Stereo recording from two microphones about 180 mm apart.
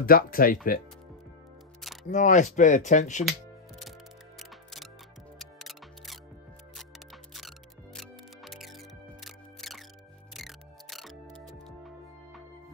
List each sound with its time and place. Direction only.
0.0 s speech: 55° left (ahead or behind)
2.0 s speech: 45° left (ahead or behind)
5.4 s music: centre (ahead or behind)
7.3 s music: centre (ahead or behind)